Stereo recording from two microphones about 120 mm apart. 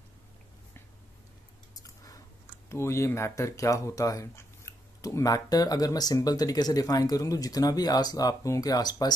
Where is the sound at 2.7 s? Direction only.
25° left (ahead or behind).